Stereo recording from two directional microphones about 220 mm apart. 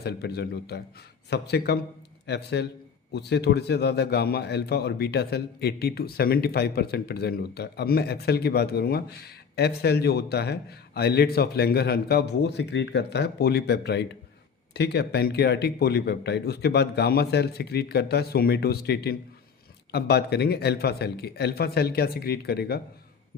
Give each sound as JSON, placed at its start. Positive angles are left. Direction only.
{"t": 0.0, "sound": "a man's voice", "side_deg": 45}